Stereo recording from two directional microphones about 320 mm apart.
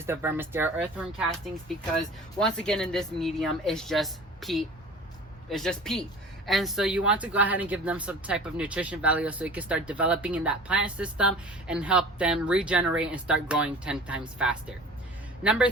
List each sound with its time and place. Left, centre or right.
0.0 s speech: centre